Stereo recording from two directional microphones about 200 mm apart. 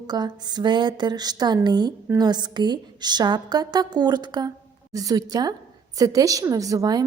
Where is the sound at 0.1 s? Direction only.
20° right (ahead or behind).